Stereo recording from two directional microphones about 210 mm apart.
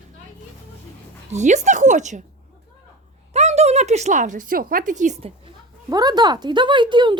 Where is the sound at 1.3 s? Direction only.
35° right (ahead or behind).